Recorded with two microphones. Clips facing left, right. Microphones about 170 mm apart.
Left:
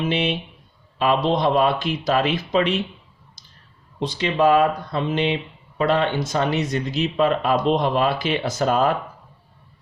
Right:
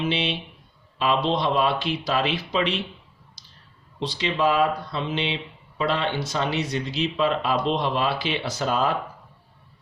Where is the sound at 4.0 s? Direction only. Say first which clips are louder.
Left 4 dB; 50° left (ahead or behind).